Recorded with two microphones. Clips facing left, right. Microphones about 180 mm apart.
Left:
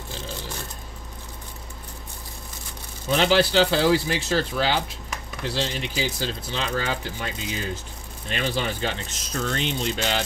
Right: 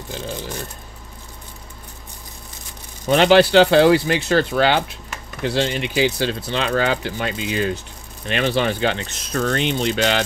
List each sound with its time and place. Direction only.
3.1 s speech: 65° right (ahead or behind)